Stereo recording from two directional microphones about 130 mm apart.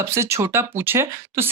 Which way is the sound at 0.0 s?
20° right (ahead or behind).